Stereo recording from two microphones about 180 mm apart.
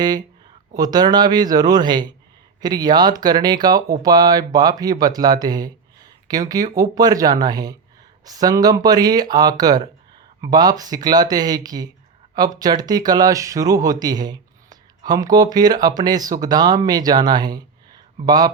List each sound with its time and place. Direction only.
0.7 s speech: 20° right (ahead or behind)